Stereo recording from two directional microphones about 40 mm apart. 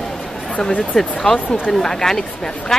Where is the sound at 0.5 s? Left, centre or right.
Left.